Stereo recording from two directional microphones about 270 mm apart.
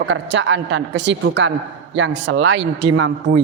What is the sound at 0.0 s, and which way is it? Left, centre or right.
A man's voice, right.